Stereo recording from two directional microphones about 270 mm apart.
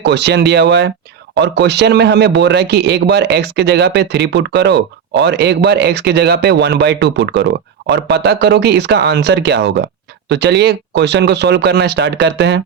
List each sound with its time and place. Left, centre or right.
0.0 s speech: right